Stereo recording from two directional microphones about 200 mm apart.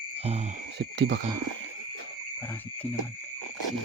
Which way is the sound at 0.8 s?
60° right (ahead or behind).